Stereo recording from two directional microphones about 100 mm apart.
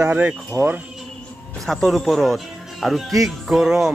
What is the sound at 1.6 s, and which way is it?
Speech, 5° left (ahead or behind).